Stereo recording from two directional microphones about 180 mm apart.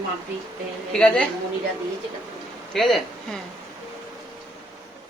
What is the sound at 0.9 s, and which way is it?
Speech, 5° left (ahead or behind).